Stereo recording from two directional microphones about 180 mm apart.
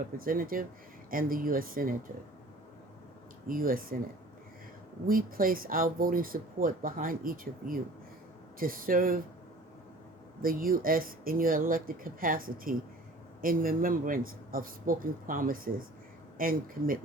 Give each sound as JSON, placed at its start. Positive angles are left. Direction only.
{"t": 0.2, "sound": "speech", "side_deg": -50}
{"t": 3.4, "sound": "speech", "side_deg": -50}
{"t": 5.0, "sound": "speech", "side_deg": -50}
{"t": 10.4, "sound": "speech", "side_deg": -50}